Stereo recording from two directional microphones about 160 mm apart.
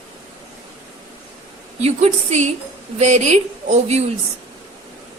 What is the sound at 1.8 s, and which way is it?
A woman's voice, 45° right (ahead or behind).